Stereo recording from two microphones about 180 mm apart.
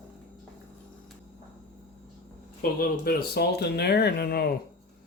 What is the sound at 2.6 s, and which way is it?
Speech, 55° left (ahead or behind).